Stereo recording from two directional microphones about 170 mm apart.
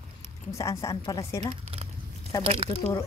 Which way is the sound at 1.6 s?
35° right (ahead or behind).